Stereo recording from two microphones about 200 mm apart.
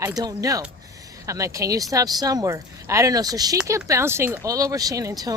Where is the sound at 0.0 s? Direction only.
20° right (ahead or behind).